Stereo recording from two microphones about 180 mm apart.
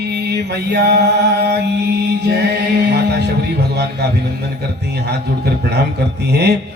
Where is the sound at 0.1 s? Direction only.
65° right (ahead or behind).